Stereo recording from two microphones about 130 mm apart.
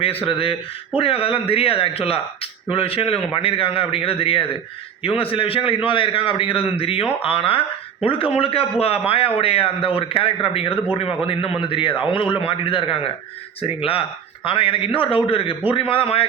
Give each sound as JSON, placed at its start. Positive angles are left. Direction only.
{"t": 0.0, "sound": "a man's voice", "side_deg": 45}